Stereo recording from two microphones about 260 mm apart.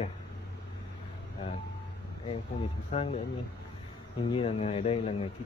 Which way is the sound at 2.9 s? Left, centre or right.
Left.